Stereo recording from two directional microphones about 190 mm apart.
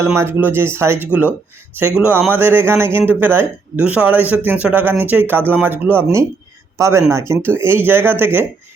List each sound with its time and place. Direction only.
0.0 s speech: 15° right (ahead or behind)